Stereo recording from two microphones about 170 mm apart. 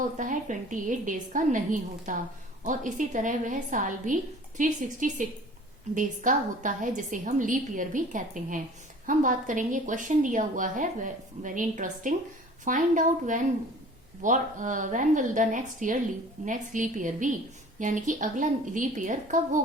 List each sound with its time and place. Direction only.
0.2 s a woman's voice: 50° right (ahead or behind)